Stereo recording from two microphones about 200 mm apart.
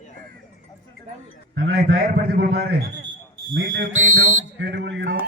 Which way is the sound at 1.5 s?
60° right (ahead or behind).